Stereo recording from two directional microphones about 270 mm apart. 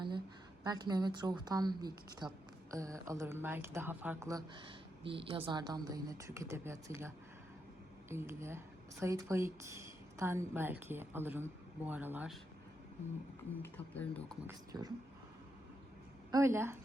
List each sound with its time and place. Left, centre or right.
0.6 s speech: centre
8.1 s speech: centre
13.6 s speech: centre
14.4 s speech: centre
16.3 s speech: centre